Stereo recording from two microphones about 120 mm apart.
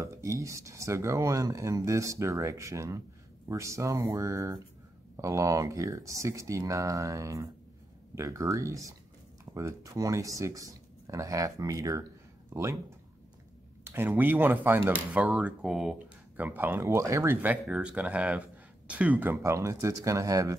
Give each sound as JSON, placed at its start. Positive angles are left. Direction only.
{"t": 0.0, "sound": "speech", "side_deg": -25}
{"t": 12.4, "sound": "a sound", "side_deg": -25}
{"t": 13.8, "sound": "speech", "side_deg": -15}
{"t": 19.3, "sound": "speech", "side_deg": -25}